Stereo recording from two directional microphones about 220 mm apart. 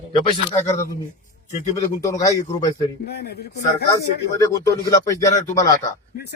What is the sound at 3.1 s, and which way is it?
Speech, 50° left (ahead or behind).